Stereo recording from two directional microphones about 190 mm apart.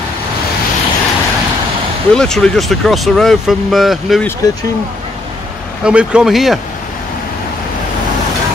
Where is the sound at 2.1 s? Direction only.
5° left (ahead or behind).